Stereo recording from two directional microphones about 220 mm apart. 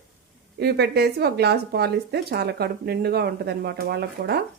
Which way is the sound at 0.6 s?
50° right (ahead or behind).